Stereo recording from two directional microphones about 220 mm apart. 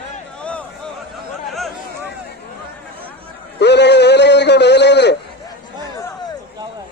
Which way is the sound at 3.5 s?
50° left (ahead or behind).